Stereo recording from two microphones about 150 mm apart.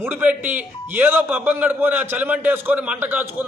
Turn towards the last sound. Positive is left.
turn(degrees=-10)  # may be behind; listen again after turning